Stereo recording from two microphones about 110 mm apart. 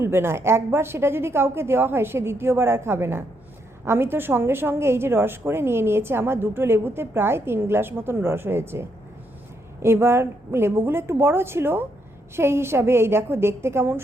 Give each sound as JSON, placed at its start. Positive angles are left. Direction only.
{"t": 0.0, "sound": "a woman's voice", "side_deg": -20}